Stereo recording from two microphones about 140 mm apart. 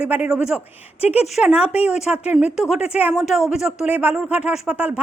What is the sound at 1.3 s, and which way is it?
Speech, 10° right (ahead or behind).